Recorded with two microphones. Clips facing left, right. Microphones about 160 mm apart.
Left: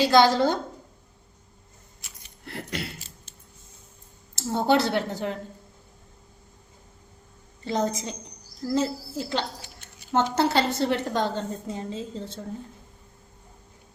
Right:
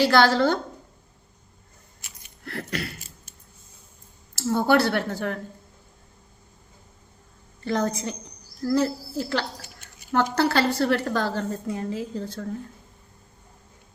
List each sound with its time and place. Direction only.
0.0 s speech: 20° left (ahead or behind)
2.4 s keys jangling: 20° left (ahead or behind)
4.4 s speech: 20° left (ahead or behind)
7.6 s speech: 20° left (ahead or behind)